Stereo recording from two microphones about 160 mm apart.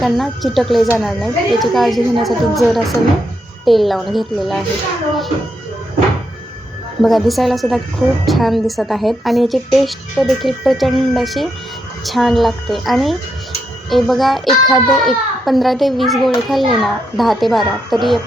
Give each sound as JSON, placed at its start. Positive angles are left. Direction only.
{"t": 0.0, "sound": "a woman's voice", "side_deg": 0}
{"t": 7.0, "sound": "a woman's voice", "side_deg": 0}